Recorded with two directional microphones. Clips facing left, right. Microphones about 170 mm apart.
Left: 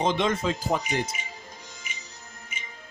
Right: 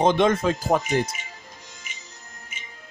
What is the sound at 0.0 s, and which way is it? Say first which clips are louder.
Speech: right 6 dB; 50° right (ahead or behind).